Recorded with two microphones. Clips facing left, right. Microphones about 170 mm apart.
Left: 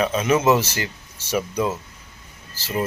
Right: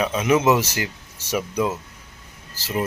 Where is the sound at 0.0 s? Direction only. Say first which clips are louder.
Even; 15° right (ahead or behind).